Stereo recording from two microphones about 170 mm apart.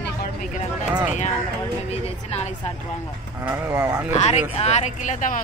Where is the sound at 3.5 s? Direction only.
15° right (ahead or behind).